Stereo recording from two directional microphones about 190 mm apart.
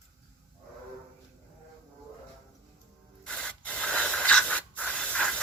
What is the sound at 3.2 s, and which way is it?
Sanding, 5° left (ahead or behind).